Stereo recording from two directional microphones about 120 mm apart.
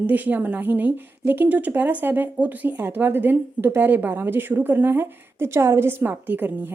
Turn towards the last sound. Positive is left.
turn(degrees=-15)  # may be behind; listen again after turning